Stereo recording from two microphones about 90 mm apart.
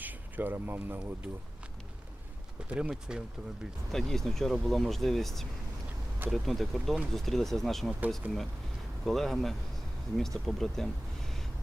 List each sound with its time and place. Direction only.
0.0 s speech: 20° right (ahead or behind)
2.6 s speech: 10° right (ahead or behind)
3.9 s speech: 5° left (ahead or behind)
9.0 s speech: centre (ahead or behind)